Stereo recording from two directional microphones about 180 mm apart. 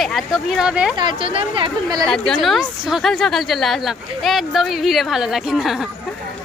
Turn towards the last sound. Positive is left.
turn(degrees=0)  # may be behind; listen again after turning